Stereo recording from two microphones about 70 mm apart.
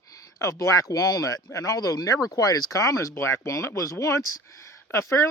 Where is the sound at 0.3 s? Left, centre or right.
Left.